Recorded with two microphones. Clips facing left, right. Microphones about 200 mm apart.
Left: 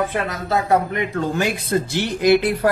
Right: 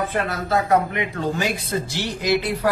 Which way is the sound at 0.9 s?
50° left (ahead or behind).